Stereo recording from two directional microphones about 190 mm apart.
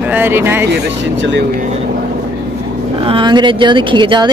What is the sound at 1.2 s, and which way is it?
Speech, 70° right (ahead or behind).